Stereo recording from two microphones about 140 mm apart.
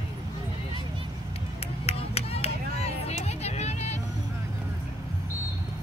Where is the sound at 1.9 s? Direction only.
45° left (ahead or behind).